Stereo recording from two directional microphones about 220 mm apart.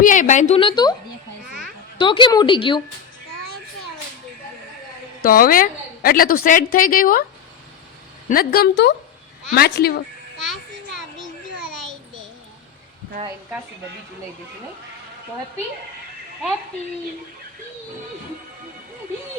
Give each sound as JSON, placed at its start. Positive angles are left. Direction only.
{"t": 0.0, "sound": "a woman's voice", "side_deg": 35}
{"t": 1.5, "sound": "children playing", "side_deg": 0}
{"t": 2.0, "sound": "a woman's voice", "side_deg": 20}
{"t": 5.2, "sound": "a woman's voice", "side_deg": 40}
{"t": 8.3, "sound": "a woman's voice", "side_deg": 45}